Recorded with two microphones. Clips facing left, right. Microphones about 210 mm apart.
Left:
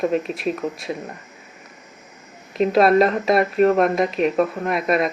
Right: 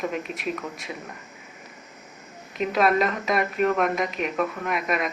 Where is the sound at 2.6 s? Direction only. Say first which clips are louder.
Left 7 dB; 35° left (ahead or behind).